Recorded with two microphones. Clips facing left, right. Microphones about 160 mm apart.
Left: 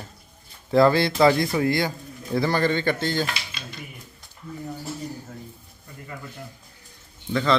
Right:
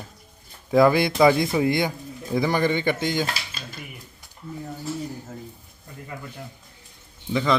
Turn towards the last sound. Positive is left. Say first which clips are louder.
# even
turn(degrees=-15)  # may be behind; listen again after turning